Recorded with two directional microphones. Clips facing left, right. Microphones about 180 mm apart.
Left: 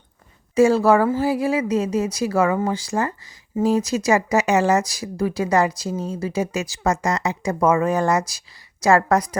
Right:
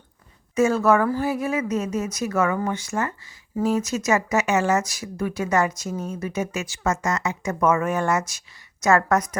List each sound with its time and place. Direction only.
0.5 s speech: 35° left (ahead or behind)